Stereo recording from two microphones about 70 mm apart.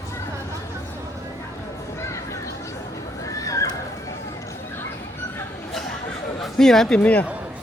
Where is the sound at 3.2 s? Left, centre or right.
Left.